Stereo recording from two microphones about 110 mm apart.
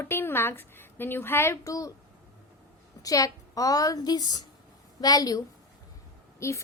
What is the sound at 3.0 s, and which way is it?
A woman's voice, 30° left (ahead or behind).